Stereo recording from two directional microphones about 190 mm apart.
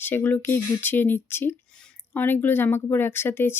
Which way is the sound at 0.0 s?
10° left (ahead or behind).